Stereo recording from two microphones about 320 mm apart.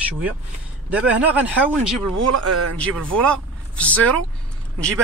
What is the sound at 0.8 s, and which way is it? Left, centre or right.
Speech, centre.